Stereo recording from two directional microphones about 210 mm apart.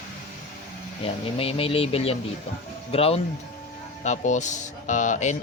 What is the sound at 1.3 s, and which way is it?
Speech, 25° left (ahead or behind).